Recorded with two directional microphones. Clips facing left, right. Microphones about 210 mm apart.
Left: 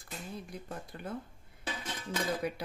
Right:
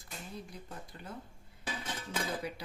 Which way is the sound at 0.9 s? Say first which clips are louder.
Left 6 dB; 55° left (ahead or behind).